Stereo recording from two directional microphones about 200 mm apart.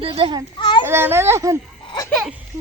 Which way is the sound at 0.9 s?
10° right (ahead or behind).